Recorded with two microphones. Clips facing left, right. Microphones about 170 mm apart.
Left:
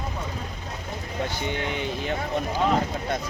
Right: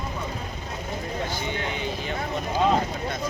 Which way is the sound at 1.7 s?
60° left (ahead or behind).